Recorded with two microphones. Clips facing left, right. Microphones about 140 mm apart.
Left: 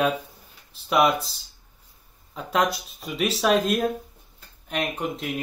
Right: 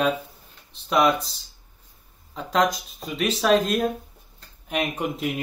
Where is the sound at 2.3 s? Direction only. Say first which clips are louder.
Right 2 dB; 5° left (ahead or behind).